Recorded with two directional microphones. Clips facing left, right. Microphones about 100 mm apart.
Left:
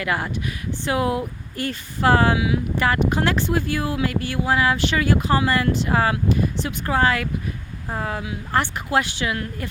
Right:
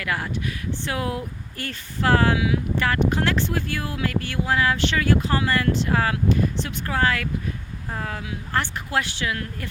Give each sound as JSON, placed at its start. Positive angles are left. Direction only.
{"t": 0.0, "sound": "speech", "side_deg": 20}